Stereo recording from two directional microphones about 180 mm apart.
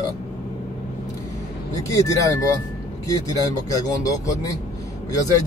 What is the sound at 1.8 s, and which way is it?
Speech, 20° left (ahead or behind).